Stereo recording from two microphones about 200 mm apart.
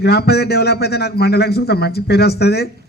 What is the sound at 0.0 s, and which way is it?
A man's voice, 55° left (ahead or behind).